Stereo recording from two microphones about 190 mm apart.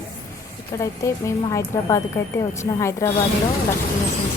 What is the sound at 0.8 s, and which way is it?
A woman's voice, 15° left (ahead or behind).